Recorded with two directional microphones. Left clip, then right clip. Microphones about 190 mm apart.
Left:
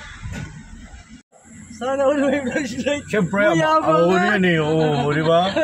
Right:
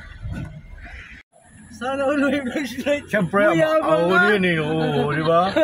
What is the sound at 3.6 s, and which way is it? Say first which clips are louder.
Speech: left 1 dB; 20° right (ahead or behind).